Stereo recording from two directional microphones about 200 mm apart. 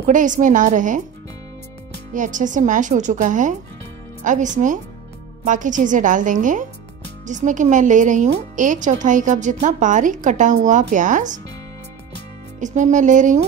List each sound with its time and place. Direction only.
0.0 s a woman's voice: 40° right (ahead or behind)
2.1 s a woman's voice: 40° right (ahead or behind)
12.5 s a woman's voice: 40° right (ahead or behind)